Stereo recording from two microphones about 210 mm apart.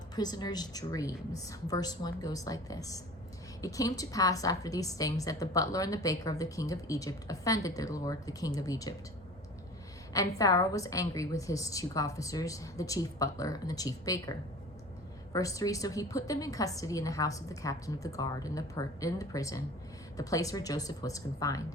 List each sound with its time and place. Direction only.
0.2 s a woman's voice: 20° left (ahead or behind)
10.1 s a woman's voice: 15° left (ahead or behind)